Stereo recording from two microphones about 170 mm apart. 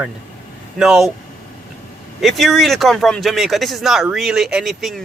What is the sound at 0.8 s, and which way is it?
Speech, 5° right (ahead or behind).